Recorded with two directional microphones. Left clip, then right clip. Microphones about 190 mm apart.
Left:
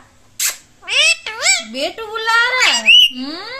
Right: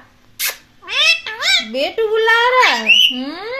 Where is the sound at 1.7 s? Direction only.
40° right (ahead or behind).